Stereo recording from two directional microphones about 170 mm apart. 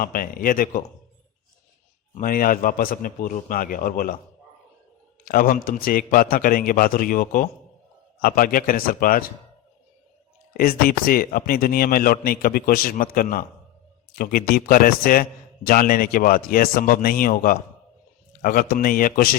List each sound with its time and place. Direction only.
0.0 s a man's voice: 55° left (ahead or behind)
2.1 s a man's voice: 55° left (ahead or behind)
5.2 s a man's voice: 60° left (ahead or behind)
10.5 s a man's voice: 60° left (ahead or behind)